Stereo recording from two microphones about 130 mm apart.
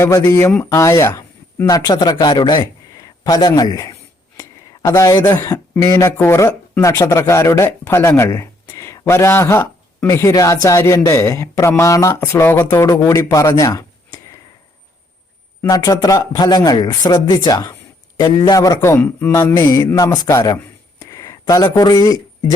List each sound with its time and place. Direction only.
0.0 s speech: 20° left (ahead or behind)
4.4 s a sound: 25° left (ahead or behind)
5.1 s speech: 25° left (ahead or behind)
15.7 s speech: 30° left (ahead or behind)